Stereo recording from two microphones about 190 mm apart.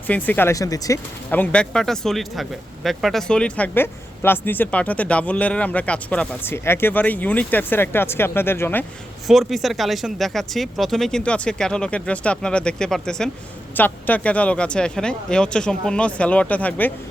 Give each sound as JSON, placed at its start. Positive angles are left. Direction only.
{"t": 0.1, "sound": "speech", "side_deg": 10}
{"t": 9.2, "sound": "speech", "side_deg": 0}